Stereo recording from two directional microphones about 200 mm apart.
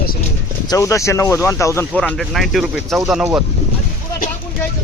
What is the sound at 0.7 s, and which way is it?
Speech, 15° left (ahead or behind).